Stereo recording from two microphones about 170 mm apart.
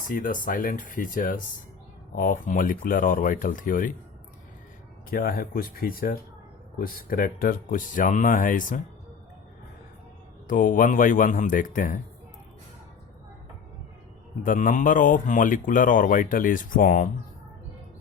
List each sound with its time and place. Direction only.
0.1 s speech: 50° left (ahead or behind)
5.0 s speech: 60° left (ahead or behind)
10.4 s speech: 50° left (ahead or behind)
14.4 s speech: 50° left (ahead or behind)